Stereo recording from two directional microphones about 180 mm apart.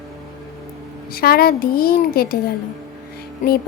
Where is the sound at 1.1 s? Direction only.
55° left (ahead or behind).